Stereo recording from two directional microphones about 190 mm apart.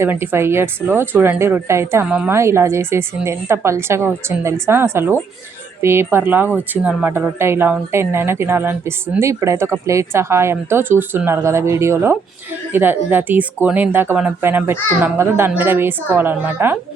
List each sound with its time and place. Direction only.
0.0 s speech: 10° right (ahead or behind)